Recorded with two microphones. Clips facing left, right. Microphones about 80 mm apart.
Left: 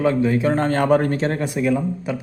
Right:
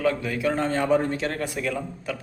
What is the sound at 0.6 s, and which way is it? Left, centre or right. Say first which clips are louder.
Speech: left 4 dB; left.